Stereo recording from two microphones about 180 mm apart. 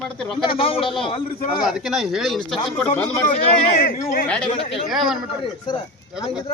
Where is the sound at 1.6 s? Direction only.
Centre (ahead or behind).